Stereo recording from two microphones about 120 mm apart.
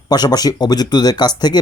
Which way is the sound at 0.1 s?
35° left (ahead or behind).